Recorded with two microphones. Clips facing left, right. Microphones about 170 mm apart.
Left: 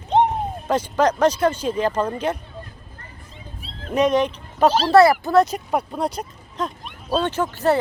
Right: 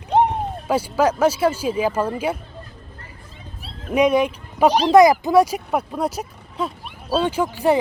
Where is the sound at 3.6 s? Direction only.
10° right (ahead or behind).